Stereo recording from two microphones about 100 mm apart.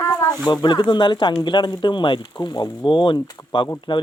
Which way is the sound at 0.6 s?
50° left (ahead or behind).